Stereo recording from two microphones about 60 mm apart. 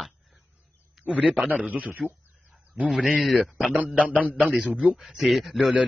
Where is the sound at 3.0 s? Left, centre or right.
Centre.